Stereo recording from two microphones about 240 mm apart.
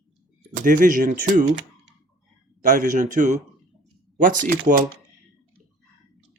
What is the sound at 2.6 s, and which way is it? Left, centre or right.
Speech, right.